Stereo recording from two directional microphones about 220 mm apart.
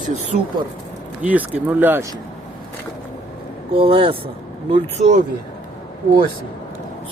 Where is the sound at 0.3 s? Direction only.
35° right (ahead or behind).